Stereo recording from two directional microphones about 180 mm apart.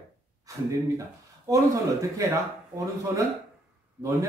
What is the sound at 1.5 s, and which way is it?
Speech, 15° right (ahead or behind).